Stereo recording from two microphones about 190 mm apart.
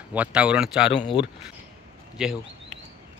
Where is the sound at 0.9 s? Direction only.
25° left (ahead or behind).